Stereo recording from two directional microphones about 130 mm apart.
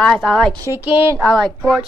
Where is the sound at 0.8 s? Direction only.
15° right (ahead or behind).